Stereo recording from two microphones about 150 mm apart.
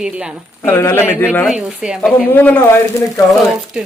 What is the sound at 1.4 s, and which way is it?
Speech, 5° right (ahead or behind).